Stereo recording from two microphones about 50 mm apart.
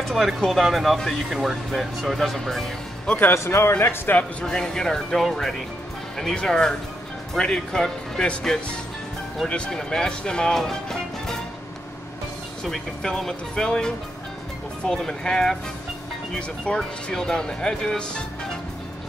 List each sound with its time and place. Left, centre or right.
0.1 s speech: centre
3.7 s speech: left
4.5 s speech: centre
12.6 s speech: centre